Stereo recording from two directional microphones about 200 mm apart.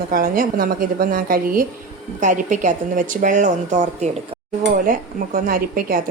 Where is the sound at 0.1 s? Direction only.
45° right (ahead or behind).